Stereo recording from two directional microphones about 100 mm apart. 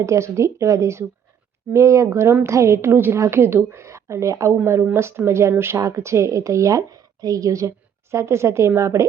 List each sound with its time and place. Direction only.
0.0 s a woman's voice: 30° right (ahead or behind)